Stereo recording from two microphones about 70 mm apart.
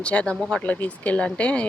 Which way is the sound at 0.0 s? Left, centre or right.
Centre.